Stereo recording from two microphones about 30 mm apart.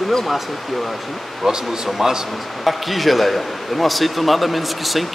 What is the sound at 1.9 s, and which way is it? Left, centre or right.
A man's voice, centre.